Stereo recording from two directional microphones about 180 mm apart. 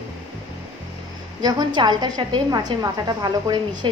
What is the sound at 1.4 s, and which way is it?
A woman's voice, 25° right (ahead or behind).